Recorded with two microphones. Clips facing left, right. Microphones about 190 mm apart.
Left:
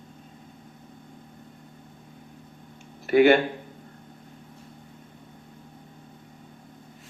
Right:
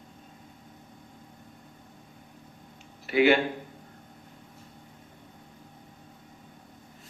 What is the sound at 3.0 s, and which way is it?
Speech, 50° left (ahead or behind).